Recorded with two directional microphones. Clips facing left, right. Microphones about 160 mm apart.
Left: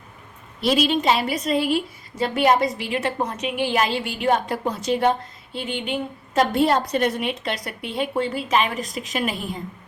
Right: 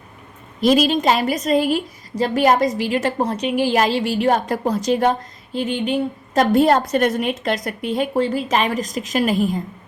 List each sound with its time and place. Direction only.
0.6 s a woman's voice: 45° right (ahead or behind)